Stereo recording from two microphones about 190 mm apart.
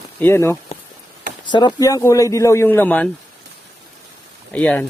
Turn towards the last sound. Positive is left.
turn(degrees=5)  # may be behind; listen again after turning